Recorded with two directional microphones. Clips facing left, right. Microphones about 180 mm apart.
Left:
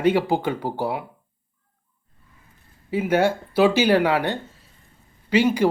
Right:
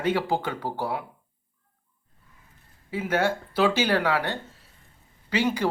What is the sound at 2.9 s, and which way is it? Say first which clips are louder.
Speech: left 5 dB; 15° left (ahead or behind).